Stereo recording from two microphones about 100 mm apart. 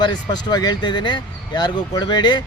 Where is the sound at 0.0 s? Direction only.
45° left (ahead or behind).